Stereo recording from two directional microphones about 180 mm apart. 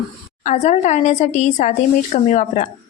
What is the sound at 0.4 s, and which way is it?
A woman's voice, 40° left (ahead or behind).